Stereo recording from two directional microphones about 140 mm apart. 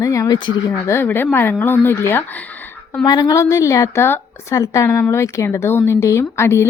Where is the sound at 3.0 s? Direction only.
30° left (ahead or behind).